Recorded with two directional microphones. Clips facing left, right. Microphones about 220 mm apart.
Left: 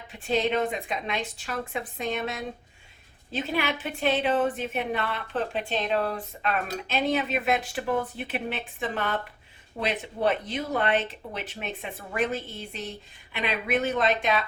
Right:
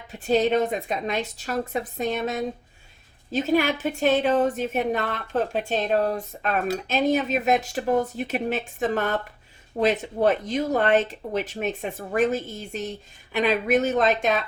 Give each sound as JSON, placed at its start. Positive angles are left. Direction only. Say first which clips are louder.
{"t": 0.1, "sound": "a woman's voice", "louder": "right 5 dB", "side_deg": -40}